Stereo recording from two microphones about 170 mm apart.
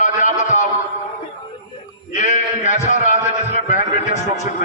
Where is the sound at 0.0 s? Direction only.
45° left (ahead or behind).